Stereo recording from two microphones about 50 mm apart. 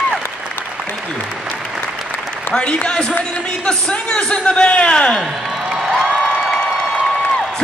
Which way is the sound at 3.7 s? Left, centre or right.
Centre.